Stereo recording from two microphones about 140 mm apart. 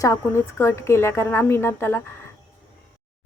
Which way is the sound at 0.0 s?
20° left (ahead or behind).